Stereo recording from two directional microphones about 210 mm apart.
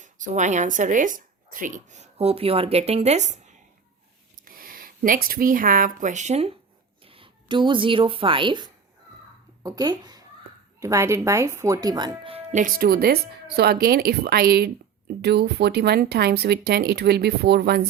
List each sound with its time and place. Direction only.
0.0 s a woman's voice: 35° right (ahead or behind)